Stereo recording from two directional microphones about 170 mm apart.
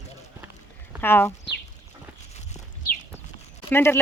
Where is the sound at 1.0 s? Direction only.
15° left (ahead or behind).